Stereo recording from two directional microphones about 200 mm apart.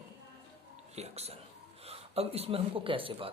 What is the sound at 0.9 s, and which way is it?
Speech, 30° right (ahead or behind).